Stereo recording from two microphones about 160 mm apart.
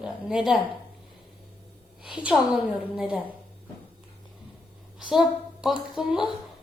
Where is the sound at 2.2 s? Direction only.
30° left (ahead or behind).